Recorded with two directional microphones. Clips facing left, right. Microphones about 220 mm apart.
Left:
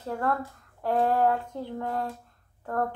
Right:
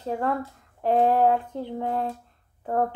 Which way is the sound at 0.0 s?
15° right (ahead or behind).